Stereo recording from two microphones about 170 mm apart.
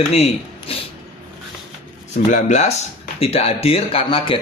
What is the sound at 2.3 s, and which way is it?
A man's voice, 45° left (ahead or behind).